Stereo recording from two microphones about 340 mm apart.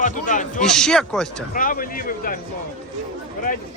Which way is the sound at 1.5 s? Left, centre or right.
Left.